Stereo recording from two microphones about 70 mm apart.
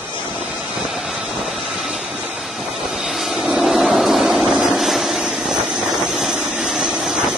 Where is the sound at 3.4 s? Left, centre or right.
Centre.